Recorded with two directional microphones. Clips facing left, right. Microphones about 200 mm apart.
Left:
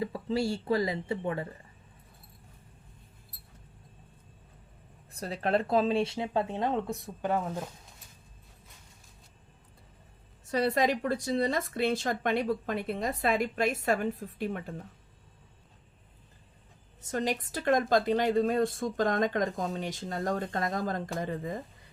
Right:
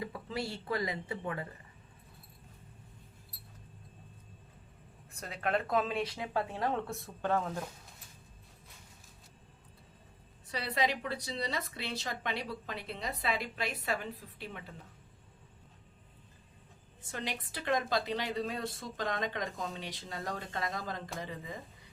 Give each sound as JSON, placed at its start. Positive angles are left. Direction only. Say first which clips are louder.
{"t": 0.0, "sound": "speech", "louder": "left 8 dB", "side_deg": 30}
{"t": 5.1, "sound": "speech", "louder": "left 5 dB", "side_deg": 35}
{"t": 10.4, "sound": "speech", "louder": "left 7 dB", "side_deg": 45}
{"t": 17.0, "sound": "a woman's voice", "louder": "left 9 dB", "side_deg": 40}